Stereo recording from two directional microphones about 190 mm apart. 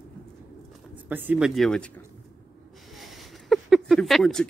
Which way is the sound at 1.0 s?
10° right (ahead or behind).